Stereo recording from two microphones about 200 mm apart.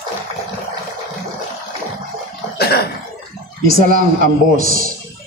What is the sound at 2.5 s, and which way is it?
Cough, 50° left (ahead or behind).